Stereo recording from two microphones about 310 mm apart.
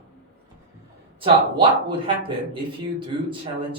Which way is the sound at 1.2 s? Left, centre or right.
Centre.